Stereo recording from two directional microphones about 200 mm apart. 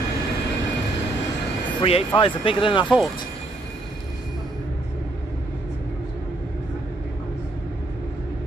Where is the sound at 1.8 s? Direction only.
25° left (ahead or behind).